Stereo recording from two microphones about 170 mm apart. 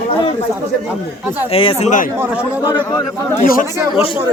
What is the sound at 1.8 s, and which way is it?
Speech, 45° left (ahead or behind).